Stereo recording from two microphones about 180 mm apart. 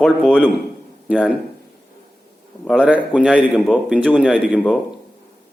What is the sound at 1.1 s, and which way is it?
Speech, 10° right (ahead or behind).